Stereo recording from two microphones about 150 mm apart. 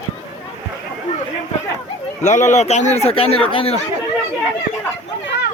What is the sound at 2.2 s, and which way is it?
A man's voice, 50° left (ahead or behind).